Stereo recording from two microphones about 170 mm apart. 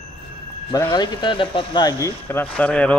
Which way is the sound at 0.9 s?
30° left (ahead or behind).